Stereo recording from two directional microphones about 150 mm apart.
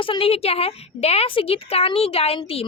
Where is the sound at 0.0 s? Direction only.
35° left (ahead or behind).